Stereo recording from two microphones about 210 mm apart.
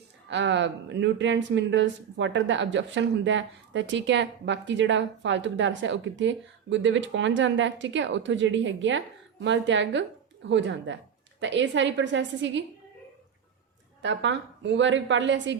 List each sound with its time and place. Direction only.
0.3 s speech: 55° right (ahead or behind)
14.0 s speech: 60° right (ahead or behind)